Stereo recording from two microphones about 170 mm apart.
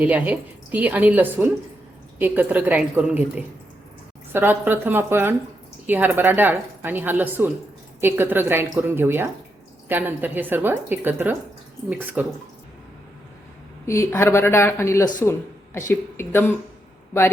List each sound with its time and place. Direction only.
0.0 s a woman's voice: 10° right (ahead or behind)
13.8 s speech: 15° left (ahead or behind)